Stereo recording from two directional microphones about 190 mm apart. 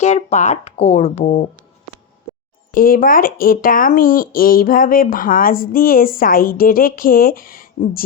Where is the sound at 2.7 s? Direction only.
50° left (ahead or behind).